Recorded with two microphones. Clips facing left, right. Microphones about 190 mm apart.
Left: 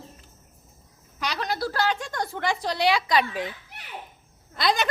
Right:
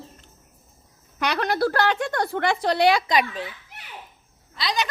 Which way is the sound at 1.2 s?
60° right (ahead or behind).